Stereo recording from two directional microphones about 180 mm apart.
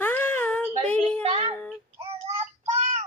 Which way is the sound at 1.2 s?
30° right (ahead or behind).